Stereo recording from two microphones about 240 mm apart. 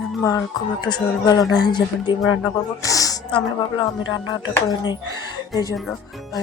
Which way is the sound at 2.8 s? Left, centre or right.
Centre.